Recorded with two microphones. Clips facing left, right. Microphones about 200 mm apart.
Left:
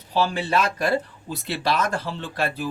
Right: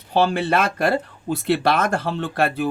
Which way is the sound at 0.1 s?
60° right (ahead or behind).